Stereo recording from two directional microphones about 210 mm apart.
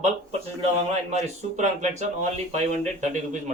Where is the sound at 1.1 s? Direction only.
35° right (ahead or behind).